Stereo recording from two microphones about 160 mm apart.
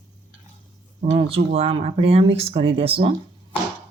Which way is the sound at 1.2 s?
35° right (ahead or behind).